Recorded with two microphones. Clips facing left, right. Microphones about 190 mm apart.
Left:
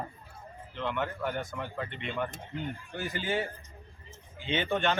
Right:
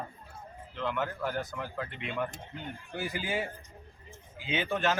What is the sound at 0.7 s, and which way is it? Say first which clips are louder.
A man's voice: even; centre (ahead or behind).